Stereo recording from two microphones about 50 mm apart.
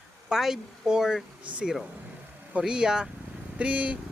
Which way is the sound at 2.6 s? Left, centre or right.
Centre.